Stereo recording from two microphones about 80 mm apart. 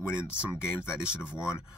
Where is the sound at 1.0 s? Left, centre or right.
Centre.